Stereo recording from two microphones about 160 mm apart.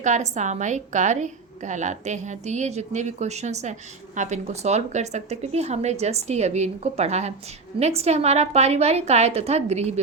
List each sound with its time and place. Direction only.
0.0 s a woman's voice: 45° right (ahead or behind)